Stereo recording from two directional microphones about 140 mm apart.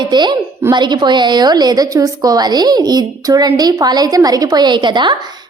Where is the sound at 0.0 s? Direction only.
30° right (ahead or behind).